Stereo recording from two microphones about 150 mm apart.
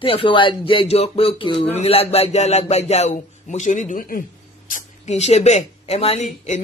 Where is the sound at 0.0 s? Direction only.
35° left (ahead or behind).